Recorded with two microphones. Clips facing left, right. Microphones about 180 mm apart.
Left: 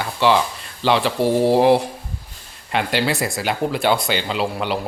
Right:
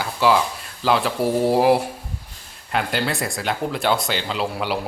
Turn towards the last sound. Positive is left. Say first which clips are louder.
# left 2 dB
turn(degrees=-5)  # may be behind; listen again after turning